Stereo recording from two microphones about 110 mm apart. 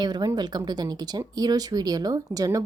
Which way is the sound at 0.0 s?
40° right (ahead or behind).